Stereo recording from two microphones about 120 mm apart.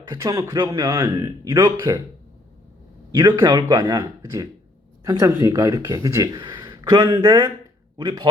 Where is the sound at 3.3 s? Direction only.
20° right (ahead or behind).